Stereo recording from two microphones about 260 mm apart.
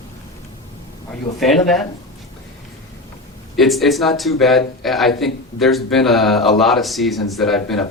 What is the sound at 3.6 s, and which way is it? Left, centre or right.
A man's voice, centre.